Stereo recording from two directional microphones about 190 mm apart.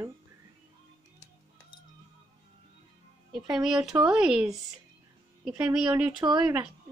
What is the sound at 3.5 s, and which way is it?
Speech, centre (ahead or behind).